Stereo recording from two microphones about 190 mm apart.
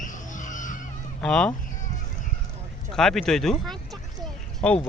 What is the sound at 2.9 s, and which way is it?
Speech, centre (ahead or behind).